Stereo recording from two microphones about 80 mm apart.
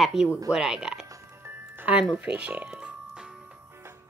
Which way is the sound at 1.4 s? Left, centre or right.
Right.